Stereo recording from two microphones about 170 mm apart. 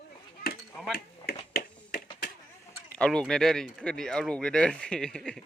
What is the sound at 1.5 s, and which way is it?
Finger snapping, 60° left (ahead or behind).